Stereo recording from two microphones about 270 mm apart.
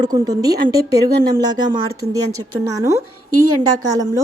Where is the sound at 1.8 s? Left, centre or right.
Right.